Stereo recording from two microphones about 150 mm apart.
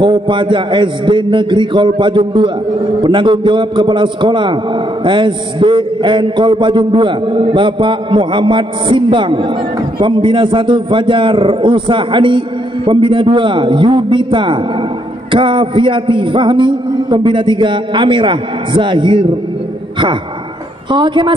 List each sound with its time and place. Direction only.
0.0 s a man's voice: 30° right (ahead or behind)
20.9 s a man's voice: 30° right (ahead or behind)